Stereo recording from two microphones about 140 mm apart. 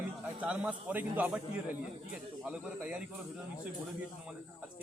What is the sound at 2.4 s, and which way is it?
Speech, 5° right (ahead or behind).